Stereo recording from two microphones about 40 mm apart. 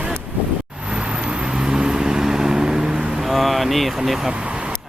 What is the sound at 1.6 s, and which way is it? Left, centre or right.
Vehicle, centre.